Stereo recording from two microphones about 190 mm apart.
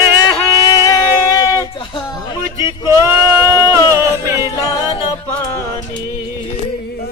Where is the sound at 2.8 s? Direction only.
15° right (ahead or behind).